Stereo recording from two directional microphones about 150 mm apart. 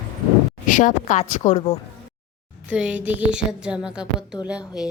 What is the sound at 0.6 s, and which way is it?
Speech, 60° left (ahead or behind).